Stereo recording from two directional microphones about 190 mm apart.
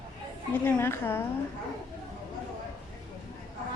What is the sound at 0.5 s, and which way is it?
Speech, 10° left (ahead or behind).